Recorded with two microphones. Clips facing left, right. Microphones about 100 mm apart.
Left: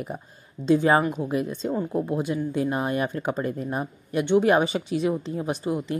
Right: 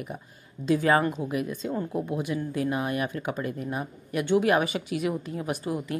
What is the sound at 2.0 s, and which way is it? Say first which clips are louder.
A woman's voice: left 3 dB; 30° left (ahead or behind).